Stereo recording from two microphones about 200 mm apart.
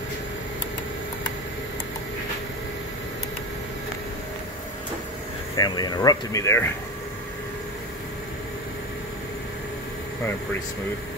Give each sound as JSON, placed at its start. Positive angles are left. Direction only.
{"t": 5.6, "sound": "speech", "side_deg": 20}